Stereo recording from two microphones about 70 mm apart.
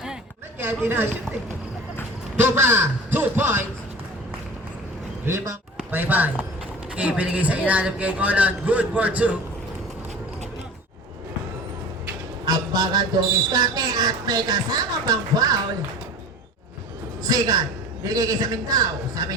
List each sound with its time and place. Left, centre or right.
0.6 s speech: right
2.3 s a man's voice: right
5.2 s speech: right
5.9 s a man's voice: right
12.5 s a sound: right
13.5 s music: right
17.2 s a man's voice: right